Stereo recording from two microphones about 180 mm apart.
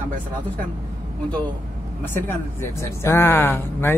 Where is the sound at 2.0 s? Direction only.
15° left (ahead or behind).